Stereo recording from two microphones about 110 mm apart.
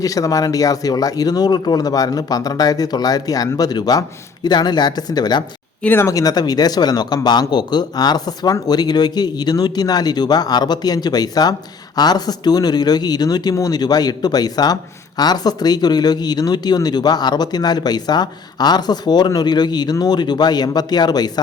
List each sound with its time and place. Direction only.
0.0 s speech: 30° left (ahead or behind)
5.8 s speech: 15° left (ahead or behind)
6.1 s speech: 35° left (ahead or behind)